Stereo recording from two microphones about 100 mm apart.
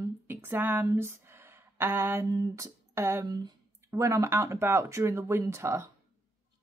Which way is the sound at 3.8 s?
30° right (ahead or behind).